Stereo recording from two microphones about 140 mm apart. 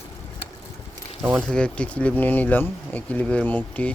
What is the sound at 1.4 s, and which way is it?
Speech, 5° left (ahead or behind).